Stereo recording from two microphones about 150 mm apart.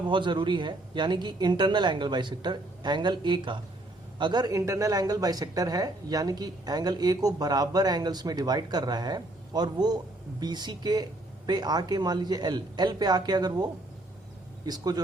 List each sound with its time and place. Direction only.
0.0 s speech: 30° right (ahead or behind)
14.7 s speech: 25° right (ahead or behind)